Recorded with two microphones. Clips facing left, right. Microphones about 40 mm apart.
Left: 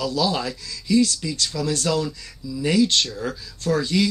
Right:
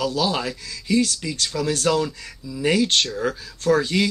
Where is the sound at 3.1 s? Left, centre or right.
Centre.